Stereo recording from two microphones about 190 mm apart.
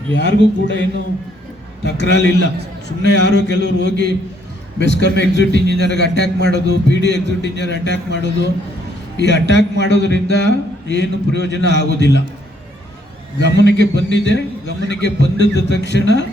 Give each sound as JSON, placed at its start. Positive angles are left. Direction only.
{"t": 0.1, "sound": "a man's voice", "side_deg": 65}
{"t": 13.4, "sound": "a man's voice", "side_deg": 65}